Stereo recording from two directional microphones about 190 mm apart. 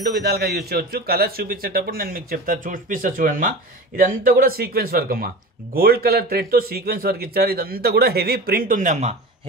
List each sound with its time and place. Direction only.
0.1 s a man's voice: 55° right (ahead or behind); by 9.1 s 40° right (ahead or behind)